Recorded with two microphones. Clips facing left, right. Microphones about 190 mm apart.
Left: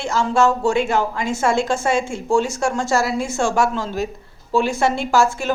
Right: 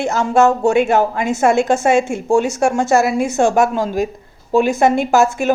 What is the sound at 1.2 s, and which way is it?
A woman's voice, 20° right (ahead or behind).